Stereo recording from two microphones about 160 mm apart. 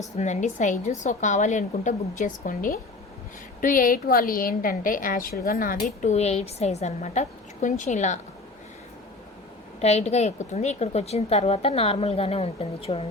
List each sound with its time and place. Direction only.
0.2 s a woman's voice: 50° left (ahead or behind)
9.8 s a woman's voice: 40° left (ahead or behind)